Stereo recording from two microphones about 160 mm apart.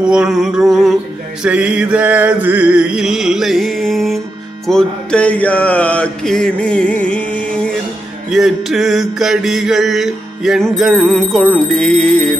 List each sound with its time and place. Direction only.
0.0 s mantra: 5° right (ahead or behind)
1.4 s music: 10° right (ahead or behind)
4.6 s mantra: 5° left (ahead or behind)
8.3 s mantra: 5° right (ahead or behind)